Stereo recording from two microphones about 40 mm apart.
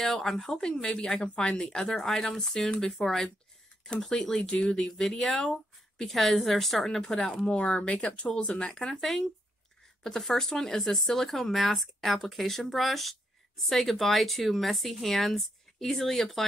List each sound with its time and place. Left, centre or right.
0.0 s speech: centre
4.1 s speech: centre
6.0 s speech: centre
7.0 s speech: centre
7.4 s speech: left; by 16.4 s centre